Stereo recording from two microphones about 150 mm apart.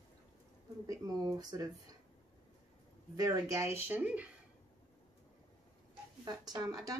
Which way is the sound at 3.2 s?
20° right (ahead or behind).